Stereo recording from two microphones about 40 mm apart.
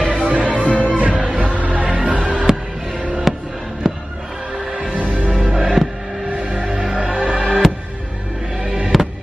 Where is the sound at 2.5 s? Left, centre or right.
Centre.